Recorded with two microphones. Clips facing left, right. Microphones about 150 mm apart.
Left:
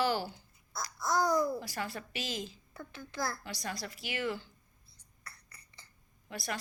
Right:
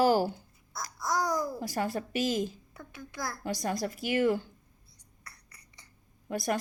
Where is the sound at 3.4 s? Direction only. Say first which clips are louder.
Right 9 dB; 45° right (ahead or behind).